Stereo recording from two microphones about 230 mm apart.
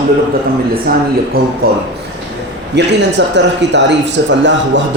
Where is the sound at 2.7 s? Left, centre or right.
Right.